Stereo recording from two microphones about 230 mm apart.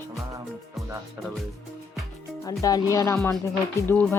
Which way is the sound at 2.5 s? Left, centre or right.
Centre.